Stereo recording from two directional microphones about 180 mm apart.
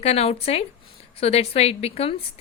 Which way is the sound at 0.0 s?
35° left (ahead or behind).